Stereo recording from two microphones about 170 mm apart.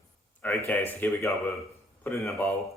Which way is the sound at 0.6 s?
10° left (ahead or behind).